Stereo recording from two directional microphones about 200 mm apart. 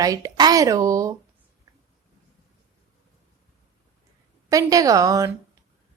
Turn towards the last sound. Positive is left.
turn(degrees=-15)  # may be behind; listen again after turning